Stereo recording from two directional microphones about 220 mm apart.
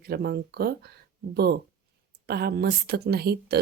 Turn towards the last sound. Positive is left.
turn(degrees=-45)  # may be behind; listen again after turning